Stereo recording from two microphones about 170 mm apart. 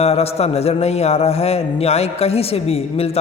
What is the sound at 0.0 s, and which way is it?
A man's voice, 35° left (ahead or behind).